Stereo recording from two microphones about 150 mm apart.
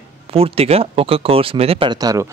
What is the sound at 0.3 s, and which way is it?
Speech, 40° right (ahead or behind).